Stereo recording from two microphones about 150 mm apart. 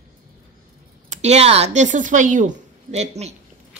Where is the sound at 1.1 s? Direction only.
50° right (ahead or behind).